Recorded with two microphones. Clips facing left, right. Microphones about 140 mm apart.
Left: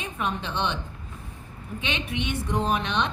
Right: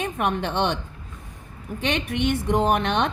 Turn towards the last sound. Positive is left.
turn(degrees=-55)  # may be behind; listen again after turning